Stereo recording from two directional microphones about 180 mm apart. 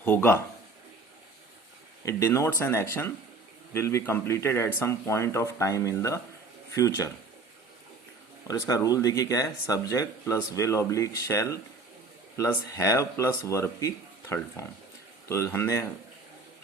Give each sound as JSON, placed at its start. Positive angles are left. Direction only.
{"t": 0.0, "sound": "speech", "side_deg": 10}
{"t": 2.0, "sound": "speech", "side_deg": 15}
{"t": 8.4, "sound": "speech", "side_deg": 15}